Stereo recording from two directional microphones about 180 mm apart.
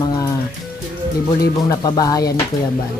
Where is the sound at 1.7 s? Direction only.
20° left (ahead or behind).